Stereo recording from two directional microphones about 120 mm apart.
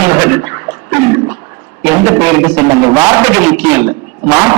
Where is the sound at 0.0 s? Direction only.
25° right (ahead or behind).